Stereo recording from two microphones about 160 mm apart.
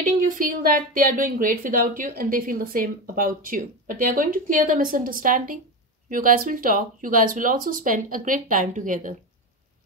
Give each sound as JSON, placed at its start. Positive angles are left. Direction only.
{"t": 0.3, "sound": "speech", "side_deg": -60}